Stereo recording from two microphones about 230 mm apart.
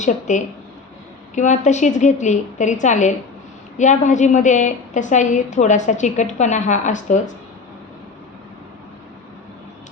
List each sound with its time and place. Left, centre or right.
0.0 s a woman's voice: left